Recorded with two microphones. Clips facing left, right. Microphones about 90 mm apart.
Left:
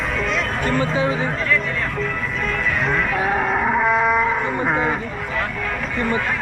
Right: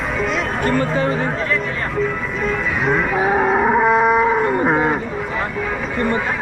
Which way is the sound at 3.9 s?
10° right (ahead or behind).